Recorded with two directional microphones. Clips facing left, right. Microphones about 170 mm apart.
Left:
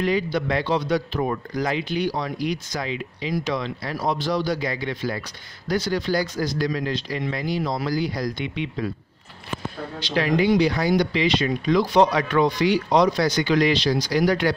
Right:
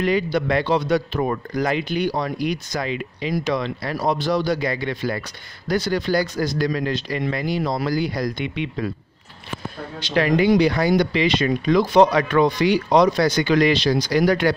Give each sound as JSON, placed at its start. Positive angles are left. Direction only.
{"t": 0.0, "sound": "speech", "side_deg": -60}
{"t": 10.1, "sound": "speech", "side_deg": -60}